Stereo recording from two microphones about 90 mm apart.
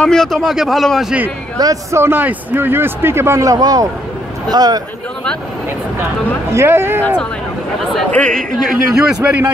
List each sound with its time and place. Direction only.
0.0 s a man's voice: 5° left (ahead or behind)
1.6 s a man's voice: 40° right (ahead or behind)
2.0 s a man's voice: 25° right (ahead or behind); by 4.8 s 45° right (ahead or behind)
6.5 s a man's voice: 30° right (ahead or behind)
8.1 s speech: 10° left (ahead or behind)
8.6 s a man's voice: 5° right (ahead or behind)
9.2 s a man's voice: 15° right (ahead or behind)